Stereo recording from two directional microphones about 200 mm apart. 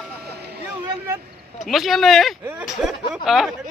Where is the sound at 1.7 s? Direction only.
Centre (ahead or behind).